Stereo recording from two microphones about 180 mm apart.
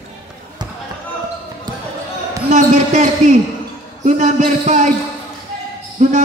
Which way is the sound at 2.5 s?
40° right (ahead or behind).